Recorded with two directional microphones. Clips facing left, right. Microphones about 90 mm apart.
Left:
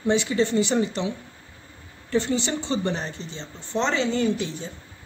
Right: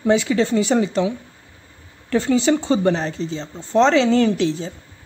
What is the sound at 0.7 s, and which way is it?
Speech, 75° right (ahead or behind).